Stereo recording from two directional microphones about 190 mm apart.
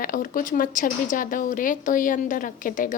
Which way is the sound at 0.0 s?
45° left (ahead or behind).